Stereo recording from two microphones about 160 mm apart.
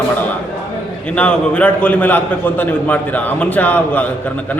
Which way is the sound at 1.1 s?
10° left (ahead or behind).